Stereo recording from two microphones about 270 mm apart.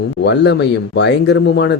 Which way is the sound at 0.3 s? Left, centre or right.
Left.